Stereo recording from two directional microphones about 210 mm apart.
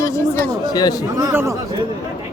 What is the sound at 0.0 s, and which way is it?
Chatter, 15° left (ahead or behind).